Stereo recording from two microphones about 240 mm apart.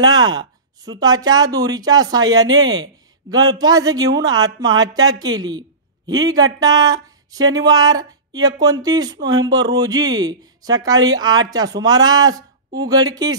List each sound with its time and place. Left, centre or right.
0.0 s speech: centre